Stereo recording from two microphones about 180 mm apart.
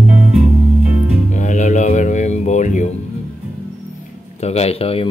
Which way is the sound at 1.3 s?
45° left (ahead or behind).